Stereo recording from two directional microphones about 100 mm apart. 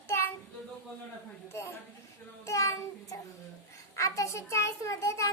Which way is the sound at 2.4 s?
30° left (ahead or behind).